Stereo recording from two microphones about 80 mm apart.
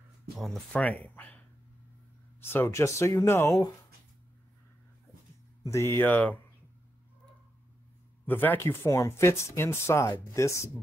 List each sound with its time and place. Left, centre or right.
0.7 s speech: centre
2.4 s speech: left
5.6 s speech: left
8.3 s speech: left